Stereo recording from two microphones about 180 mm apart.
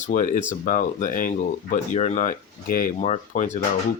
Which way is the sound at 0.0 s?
45° left (ahead or behind).